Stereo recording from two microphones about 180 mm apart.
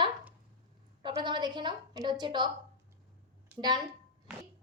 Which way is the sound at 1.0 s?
25° right (ahead or behind).